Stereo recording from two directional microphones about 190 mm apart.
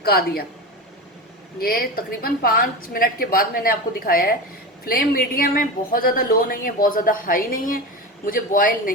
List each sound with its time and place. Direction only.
0.0 s speech: 55° left (ahead or behind)
1.5 s speech: 50° left (ahead or behind)